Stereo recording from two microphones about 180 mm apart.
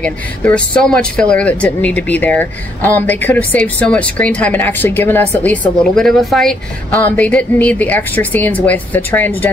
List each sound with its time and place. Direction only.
0.0 s speech: 10° left (ahead or behind)